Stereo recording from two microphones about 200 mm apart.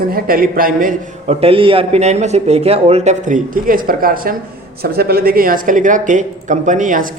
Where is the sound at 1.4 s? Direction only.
25° right (ahead or behind).